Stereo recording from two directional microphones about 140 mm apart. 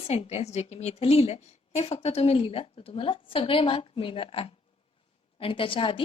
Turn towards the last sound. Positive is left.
turn(degrees=40)  # may be behind; listen again after turning